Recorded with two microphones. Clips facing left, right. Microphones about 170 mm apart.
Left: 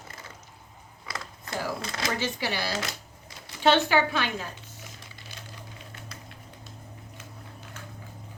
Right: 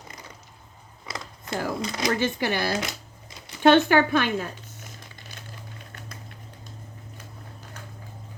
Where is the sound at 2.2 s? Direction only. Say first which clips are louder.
Right 5 dB; 50° right (ahead or behind).